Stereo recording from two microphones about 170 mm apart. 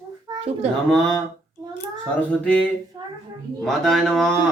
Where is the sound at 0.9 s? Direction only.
Centre (ahead or behind).